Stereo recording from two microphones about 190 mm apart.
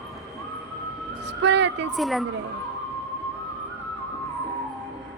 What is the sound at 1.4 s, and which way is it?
Speech, 65° right (ahead or behind).